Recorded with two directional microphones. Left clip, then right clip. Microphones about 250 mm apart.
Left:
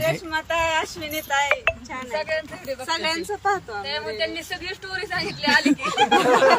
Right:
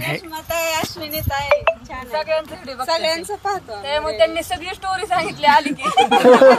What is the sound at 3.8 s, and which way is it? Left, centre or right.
Speech, centre.